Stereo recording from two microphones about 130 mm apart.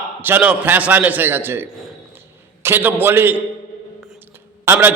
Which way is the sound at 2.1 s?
15° right (ahead or behind).